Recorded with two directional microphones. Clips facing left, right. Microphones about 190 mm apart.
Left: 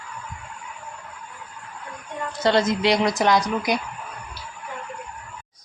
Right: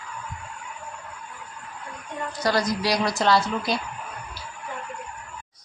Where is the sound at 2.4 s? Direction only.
25° left (ahead or behind).